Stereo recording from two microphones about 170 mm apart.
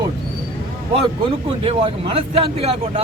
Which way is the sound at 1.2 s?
30° right (ahead or behind).